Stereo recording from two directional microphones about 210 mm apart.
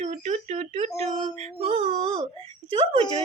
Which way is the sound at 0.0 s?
35° right (ahead or behind).